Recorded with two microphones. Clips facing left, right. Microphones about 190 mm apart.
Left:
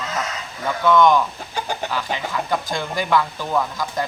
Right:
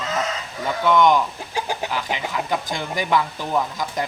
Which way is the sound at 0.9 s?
20° right (ahead or behind).